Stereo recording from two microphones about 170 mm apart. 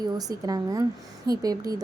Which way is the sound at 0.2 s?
20° right (ahead or behind).